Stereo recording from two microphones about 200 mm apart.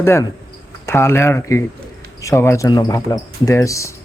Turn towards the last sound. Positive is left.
turn(degrees=15)  # may be behind; listen again after turning